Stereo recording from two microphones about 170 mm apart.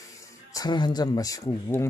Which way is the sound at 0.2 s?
20° left (ahead or behind).